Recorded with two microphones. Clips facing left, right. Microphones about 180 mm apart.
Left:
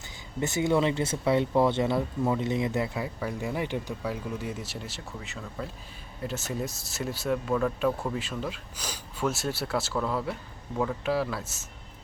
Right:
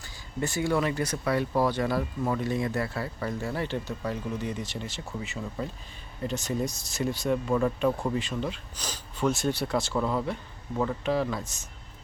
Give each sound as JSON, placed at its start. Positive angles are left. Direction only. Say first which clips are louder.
{"t": 0.3, "sound": "speech", "louder": "left 2 dB", "side_deg": 20}